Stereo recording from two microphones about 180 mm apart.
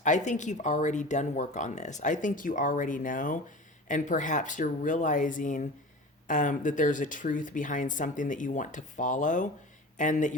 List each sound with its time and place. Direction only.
0.0 s speech: 40° left (ahead or behind)